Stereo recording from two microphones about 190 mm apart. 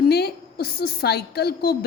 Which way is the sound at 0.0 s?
55° left (ahead or behind).